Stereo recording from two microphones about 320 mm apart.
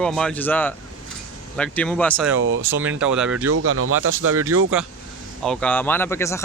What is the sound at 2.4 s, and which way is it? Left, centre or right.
Speech, right.